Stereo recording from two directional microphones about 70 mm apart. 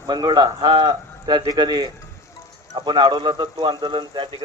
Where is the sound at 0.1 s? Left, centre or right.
Right.